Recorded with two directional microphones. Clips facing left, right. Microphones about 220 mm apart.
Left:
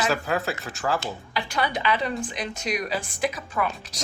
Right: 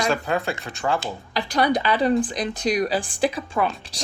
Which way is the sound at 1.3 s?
40° right (ahead or behind).